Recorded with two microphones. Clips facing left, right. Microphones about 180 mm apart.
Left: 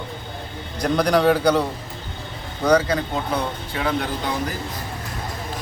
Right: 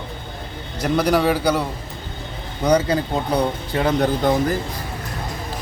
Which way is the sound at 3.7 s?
40° right (ahead or behind).